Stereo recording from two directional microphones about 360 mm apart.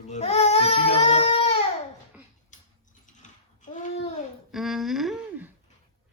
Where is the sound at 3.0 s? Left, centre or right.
Left.